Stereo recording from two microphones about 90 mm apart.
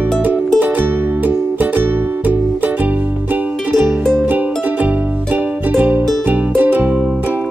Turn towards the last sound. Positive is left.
turn(degrees=-20)  # may be behind; listen again after turning